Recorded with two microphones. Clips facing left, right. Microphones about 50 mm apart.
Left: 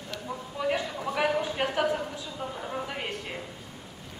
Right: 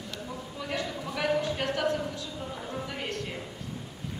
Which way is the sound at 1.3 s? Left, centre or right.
Centre.